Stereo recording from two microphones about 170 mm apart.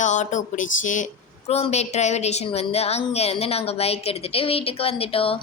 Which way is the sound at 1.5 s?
35° left (ahead or behind).